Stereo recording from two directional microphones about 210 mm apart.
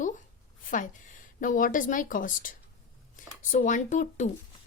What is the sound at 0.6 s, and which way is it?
Speech, 40° left (ahead or behind).